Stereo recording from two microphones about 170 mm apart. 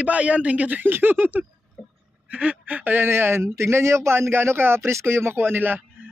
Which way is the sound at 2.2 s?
10° right (ahead or behind).